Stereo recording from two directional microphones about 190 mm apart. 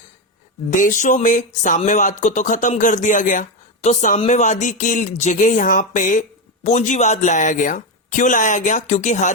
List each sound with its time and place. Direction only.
0.7 s speech: 40° left (ahead or behind)